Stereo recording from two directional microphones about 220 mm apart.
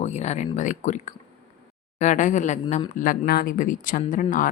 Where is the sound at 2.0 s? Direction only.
35° left (ahead or behind).